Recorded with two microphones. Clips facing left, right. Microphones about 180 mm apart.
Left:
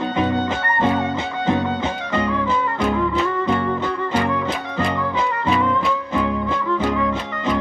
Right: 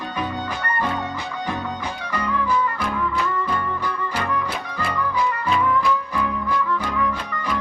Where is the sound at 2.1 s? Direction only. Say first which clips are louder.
Left 1 dB; 25° left (ahead or behind).